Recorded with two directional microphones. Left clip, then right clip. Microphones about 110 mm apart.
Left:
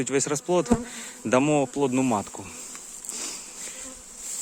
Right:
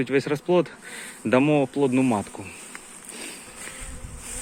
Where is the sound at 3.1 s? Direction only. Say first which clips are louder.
Left 2 dB; 55° left (ahead or behind).